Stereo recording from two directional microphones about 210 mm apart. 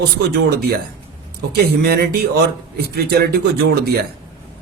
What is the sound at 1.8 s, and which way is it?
Speech, 45° right (ahead or behind).